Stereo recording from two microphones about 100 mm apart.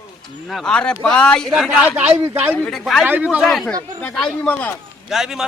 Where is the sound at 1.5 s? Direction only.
5° right (ahead or behind).